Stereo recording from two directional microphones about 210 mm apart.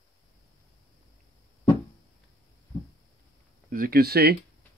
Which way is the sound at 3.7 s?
45° right (ahead or behind).